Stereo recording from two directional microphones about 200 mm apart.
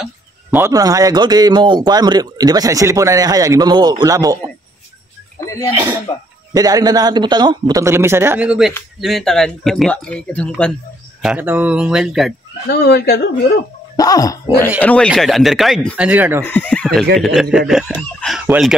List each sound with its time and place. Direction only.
0.0 s a man's voice: 10° right (ahead or behind)
6.1 s speech: 20° left (ahead or behind)
6.5 s a man's voice: 20° right (ahead or behind); by 10.7 s 5° left (ahead or behind)
11.2 s speech: 10° right (ahead or behind)
12.7 s speech: 55° left (ahead or behind)
13.9 s speech: 20° left (ahead or behind); by 16.1 s centre (ahead or behind)
16.1 s a man's voice: 10° right (ahead or behind)
16.4 s speech: 10° left (ahead or behind)